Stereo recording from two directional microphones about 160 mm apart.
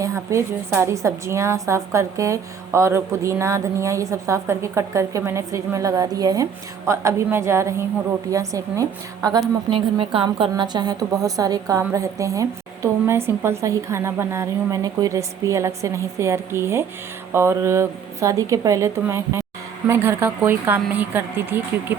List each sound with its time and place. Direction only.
0.0 s a woman's voice: 20° right (ahead or behind)
9.6 s a woman's voice: 35° right (ahead or behind); by 21.9 s 15° right (ahead or behind)